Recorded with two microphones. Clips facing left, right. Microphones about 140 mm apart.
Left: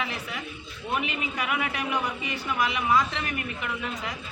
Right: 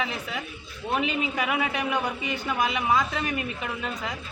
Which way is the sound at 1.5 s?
25° right (ahead or behind).